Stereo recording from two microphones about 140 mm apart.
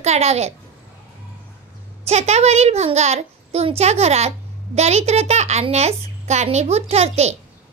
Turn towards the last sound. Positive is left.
turn(degrees=-50)  # may be behind; listen again after turning